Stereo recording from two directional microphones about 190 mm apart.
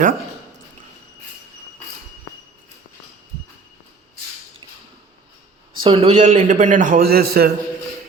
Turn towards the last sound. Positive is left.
turn(degrees=-55)  # may be behind; listen again after turning